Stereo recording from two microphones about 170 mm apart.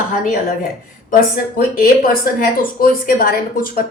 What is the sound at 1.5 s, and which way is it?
A woman's voice, 55° left (ahead or behind).